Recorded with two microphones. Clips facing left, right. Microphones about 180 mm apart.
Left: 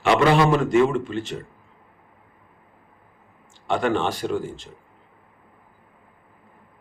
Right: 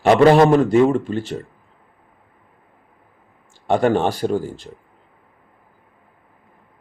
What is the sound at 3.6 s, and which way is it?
Speech, 45° right (ahead or behind).